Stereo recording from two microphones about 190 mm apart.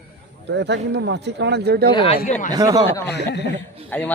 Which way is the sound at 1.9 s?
30° left (ahead or behind).